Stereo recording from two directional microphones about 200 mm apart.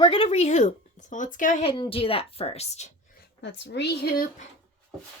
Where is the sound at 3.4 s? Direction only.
60° left (ahead or behind).